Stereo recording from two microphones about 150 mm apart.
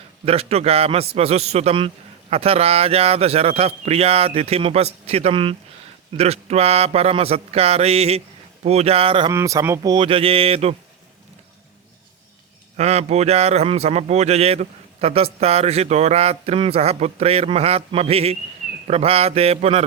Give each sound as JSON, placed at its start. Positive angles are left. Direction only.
{"t": 0.3, "sound": "a man's voice", "side_deg": -45}
{"t": 9.3, "sound": "speech", "side_deg": -20}
{"t": 9.9, "sound": "speech", "side_deg": -35}
{"t": 12.7, "sound": "a man's voice", "side_deg": -45}